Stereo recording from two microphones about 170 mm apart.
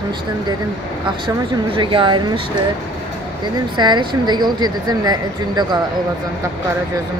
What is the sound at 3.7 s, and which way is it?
Speech, 25° right (ahead or behind).